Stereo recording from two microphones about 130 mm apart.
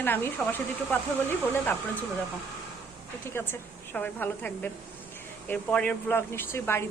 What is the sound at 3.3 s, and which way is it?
Speech, 15° left (ahead or behind).